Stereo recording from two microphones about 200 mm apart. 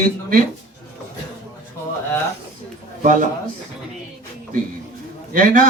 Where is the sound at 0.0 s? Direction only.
45° right (ahead or behind).